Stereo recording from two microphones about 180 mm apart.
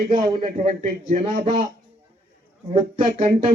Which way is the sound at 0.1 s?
30° right (ahead or behind).